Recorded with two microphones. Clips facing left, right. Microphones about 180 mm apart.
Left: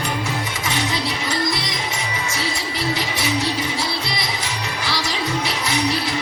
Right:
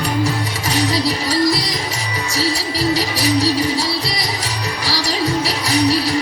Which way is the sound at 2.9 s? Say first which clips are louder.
Right 6 dB; 35° right (ahead or behind).